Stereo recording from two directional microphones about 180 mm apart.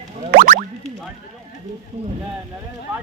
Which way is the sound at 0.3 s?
50° right (ahead or behind).